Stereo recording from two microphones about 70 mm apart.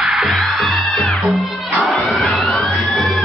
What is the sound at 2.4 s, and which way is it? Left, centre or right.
Music, centre.